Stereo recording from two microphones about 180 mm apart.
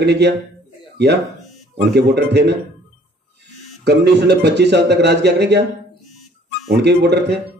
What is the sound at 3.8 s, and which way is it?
A man's voice, 70° right (ahead or behind).